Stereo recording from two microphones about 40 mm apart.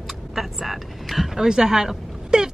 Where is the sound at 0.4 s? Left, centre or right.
Centre.